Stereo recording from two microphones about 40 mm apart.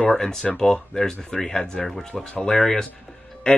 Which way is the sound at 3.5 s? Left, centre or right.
Left.